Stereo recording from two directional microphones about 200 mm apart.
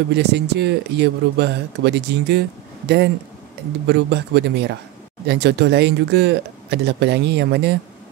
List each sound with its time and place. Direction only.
0.1 s speech: 55° right (ahead or behind)
3.8 s speech: 55° right (ahead or behind)